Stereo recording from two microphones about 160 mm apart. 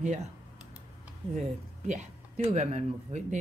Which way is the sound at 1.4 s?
50° right (ahead or behind).